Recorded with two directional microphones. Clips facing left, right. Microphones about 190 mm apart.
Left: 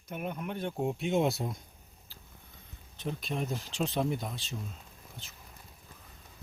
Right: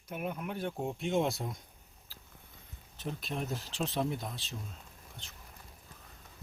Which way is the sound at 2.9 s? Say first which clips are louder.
Left 3 dB; centre (ahead or behind).